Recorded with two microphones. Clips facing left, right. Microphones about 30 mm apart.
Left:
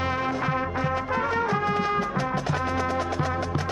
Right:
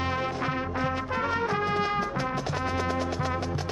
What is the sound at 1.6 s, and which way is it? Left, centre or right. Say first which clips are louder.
Music: left 2 dB; centre.